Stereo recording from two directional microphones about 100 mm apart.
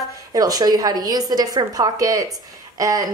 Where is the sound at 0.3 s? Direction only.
40° right (ahead or behind).